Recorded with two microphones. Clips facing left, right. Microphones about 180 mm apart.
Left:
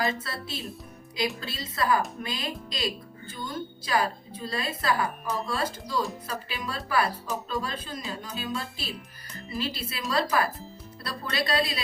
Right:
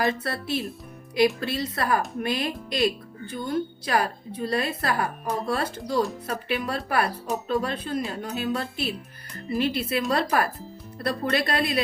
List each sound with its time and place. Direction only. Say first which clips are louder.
0.0 s speech: right 4 dB; 60° right (ahead or behind)